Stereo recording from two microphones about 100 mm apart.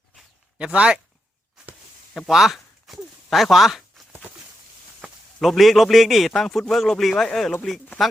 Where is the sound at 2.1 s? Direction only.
Centre (ahead or behind).